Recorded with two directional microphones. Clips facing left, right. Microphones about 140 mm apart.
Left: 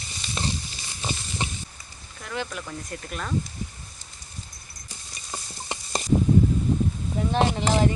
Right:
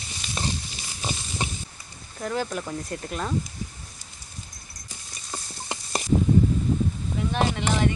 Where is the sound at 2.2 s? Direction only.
40° right (ahead or behind).